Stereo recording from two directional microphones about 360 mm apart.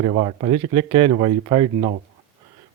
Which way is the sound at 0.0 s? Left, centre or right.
Centre.